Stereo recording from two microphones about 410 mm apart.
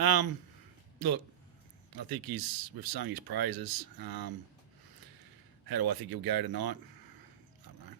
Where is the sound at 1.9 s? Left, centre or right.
Right.